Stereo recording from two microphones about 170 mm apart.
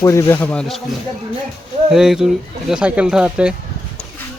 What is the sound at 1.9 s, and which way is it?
Speech, centre (ahead or behind).